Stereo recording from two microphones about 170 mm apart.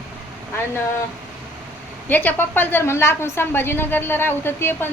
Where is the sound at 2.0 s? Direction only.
10° left (ahead or behind).